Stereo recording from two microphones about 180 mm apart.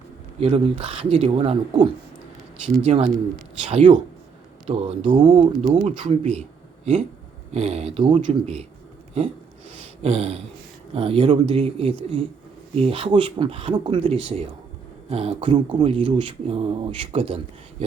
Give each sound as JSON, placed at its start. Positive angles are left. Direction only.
{"t": 0.3, "sound": "speech", "side_deg": -30}
{"t": 7.5, "sound": "speech", "side_deg": -35}
{"t": 10.0, "sound": "speech", "side_deg": -35}